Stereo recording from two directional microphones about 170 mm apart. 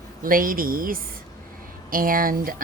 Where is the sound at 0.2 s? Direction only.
55° right (ahead or behind).